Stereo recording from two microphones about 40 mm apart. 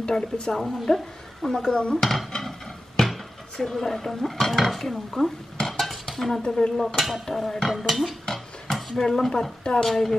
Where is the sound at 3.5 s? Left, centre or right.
Centre.